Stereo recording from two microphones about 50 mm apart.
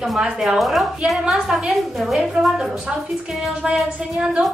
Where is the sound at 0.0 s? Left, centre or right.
Centre.